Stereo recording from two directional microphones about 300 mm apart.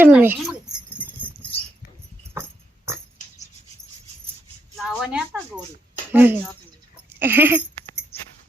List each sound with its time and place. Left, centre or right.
0.0 s speech: centre
2.3 s dog: centre
4.8 s a woman's voice: centre